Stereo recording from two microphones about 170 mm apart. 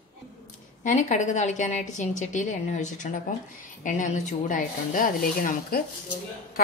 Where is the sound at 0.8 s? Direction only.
45° left (ahead or behind).